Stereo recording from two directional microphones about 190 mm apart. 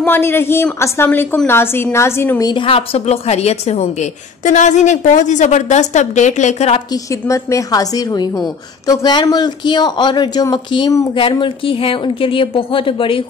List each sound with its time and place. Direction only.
0.0 s a woman's voice: 10° left (ahead or behind); by 6.8 s 35° left (ahead or behind)
6.9 s a woman's voice: 15° left (ahead or behind)